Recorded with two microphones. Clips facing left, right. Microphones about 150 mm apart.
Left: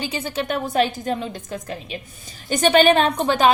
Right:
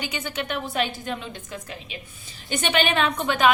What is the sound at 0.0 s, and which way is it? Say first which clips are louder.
A woman's voice: left 4 dB; 30° left (ahead or behind).